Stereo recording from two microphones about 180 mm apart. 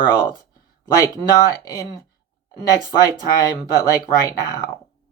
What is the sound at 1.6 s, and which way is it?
Speech, 20° left (ahead or behind).